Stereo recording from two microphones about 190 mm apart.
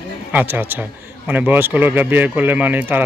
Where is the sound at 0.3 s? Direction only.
10° right (ahead or behind).